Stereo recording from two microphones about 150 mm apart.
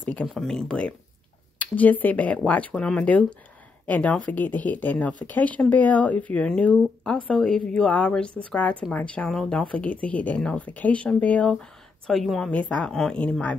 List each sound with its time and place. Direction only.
0.0 s speech: 10° left (ahead or behind)